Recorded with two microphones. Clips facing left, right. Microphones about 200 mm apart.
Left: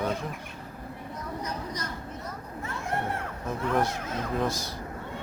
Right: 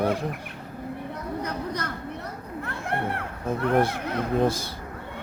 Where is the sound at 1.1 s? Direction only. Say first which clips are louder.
Right 2 dB; 60° right (ahead or behind).